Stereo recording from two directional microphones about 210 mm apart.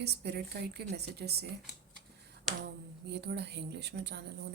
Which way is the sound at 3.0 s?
50° right (ahead or behind).